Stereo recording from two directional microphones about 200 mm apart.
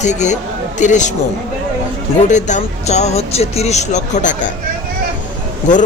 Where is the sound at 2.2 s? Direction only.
35° left (ahead or behind).